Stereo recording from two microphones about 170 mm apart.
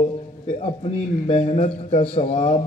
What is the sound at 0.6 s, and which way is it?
A man's voice, 35° left (ahead or behind).